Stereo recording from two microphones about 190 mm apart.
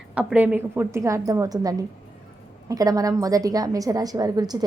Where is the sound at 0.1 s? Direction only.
5° right (ahead or behind).